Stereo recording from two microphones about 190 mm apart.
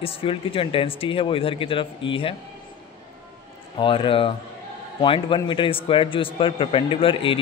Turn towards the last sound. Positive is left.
turn(degrees=25)  # may be behind; listen again after turning